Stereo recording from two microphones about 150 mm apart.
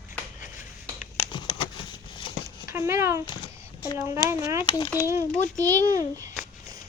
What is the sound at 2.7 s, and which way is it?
Speech, 20° right (ahead or behind).